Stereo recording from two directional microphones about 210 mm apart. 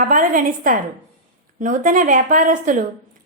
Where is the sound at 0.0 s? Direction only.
40° right (ahead or behind).